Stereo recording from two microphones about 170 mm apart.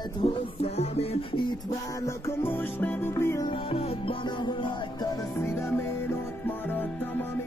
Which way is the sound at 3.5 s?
35° left (ahead or behind).